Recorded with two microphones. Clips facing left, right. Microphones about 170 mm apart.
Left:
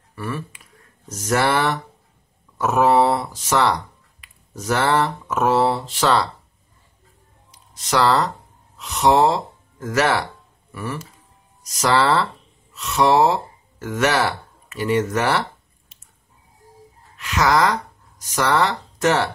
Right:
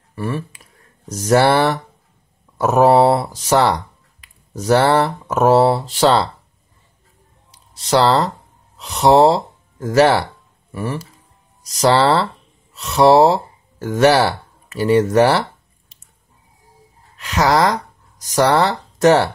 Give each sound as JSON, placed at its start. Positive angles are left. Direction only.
{"t": 0.1, "sound": "a sound", "side_deg": -30}
{"t": 1.0, "sound": "speech", "side_deg": -35}
{"t": 7.5, "sound": "speech", "side_deg": -30}
{"t": 17.2, "sound": "speech", "side_deg": -35}